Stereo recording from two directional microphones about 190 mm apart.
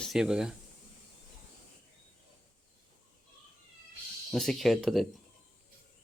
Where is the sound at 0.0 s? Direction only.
Centre (ahead or behind).